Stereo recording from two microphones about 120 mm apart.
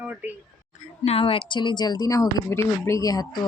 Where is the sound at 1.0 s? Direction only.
55° left (ahead or behind).